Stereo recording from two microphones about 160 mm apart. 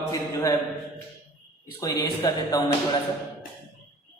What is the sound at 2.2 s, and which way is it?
Speech, 25° left (ahead or behind).